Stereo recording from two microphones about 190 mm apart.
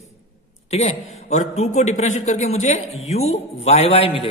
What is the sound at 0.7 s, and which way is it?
A man's voice, 35° left (ahead or behind).